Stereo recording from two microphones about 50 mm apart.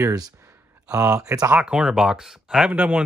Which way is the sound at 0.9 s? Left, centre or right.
Right.